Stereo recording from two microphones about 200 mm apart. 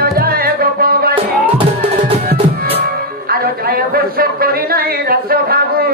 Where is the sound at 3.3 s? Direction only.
50° right (ahead or behind).